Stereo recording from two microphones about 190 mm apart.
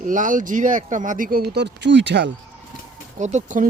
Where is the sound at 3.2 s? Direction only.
40° right (ahead or behind).